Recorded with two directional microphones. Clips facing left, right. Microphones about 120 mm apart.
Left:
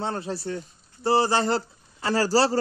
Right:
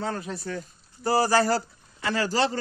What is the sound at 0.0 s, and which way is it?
A man's voice, 30° left (ahead or behind).